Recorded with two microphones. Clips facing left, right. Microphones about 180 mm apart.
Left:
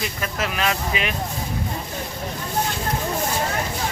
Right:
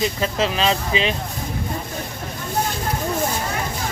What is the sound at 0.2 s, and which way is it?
Speech, 25° right (ahead or behind).